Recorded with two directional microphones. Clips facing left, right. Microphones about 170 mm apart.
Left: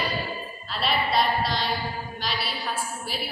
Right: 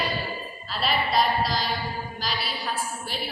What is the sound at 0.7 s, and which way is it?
A woman's voice, centre (ahead or behind).